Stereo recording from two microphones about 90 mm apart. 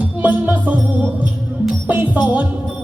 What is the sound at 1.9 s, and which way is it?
Music, 15° right (ahead or behind).